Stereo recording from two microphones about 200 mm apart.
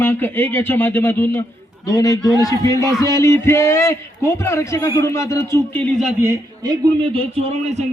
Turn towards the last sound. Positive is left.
turn(degrees=-35)  # may be behind; listen again after turning